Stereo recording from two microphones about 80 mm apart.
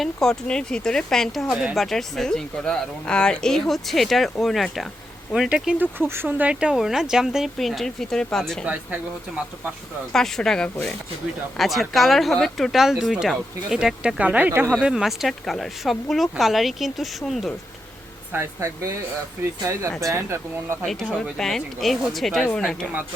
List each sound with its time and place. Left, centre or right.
0.0 s speech: centre
5.8 s speech: right; by 8.6 s centre
8.6 s speech: centre
10.1 s speech: centre; by 14.7 s right
14.8 s speech: centre
18.3 s speech: right
20.8 s speech: centre
22.4 s speech: centre